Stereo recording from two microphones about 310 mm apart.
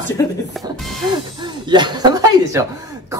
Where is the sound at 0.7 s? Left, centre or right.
Centre.